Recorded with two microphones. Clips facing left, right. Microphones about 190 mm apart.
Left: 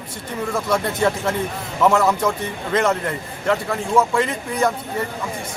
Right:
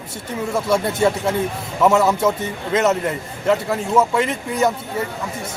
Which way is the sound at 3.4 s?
5° right (ahead or behind).